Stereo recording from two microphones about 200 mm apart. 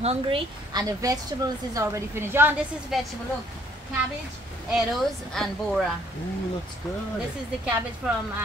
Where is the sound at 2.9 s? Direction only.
Centre (ahead or behind).